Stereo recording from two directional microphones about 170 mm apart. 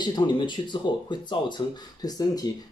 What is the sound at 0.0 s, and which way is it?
Speech, 25° left (ahead or behind).